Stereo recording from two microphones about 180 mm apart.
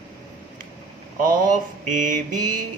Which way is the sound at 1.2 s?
50° right (ahead or behind).